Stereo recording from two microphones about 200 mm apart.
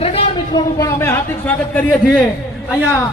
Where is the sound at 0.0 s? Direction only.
30° left (ahead or behind).